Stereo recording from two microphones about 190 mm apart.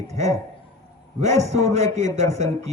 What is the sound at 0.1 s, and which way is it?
A man's voice, 35° right (ahead or behind).